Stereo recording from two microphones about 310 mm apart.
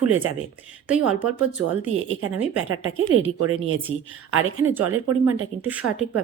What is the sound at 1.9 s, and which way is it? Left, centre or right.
A woman's voice, right.